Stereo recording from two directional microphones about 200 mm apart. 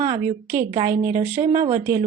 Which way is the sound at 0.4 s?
10° right (ahead or behind).